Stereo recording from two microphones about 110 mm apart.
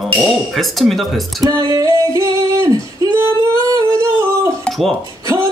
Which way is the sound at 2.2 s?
25° right (ahead or behind).